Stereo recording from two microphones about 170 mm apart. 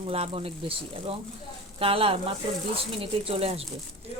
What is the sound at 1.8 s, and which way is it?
A woman's voice, 35° right (ahead or behind).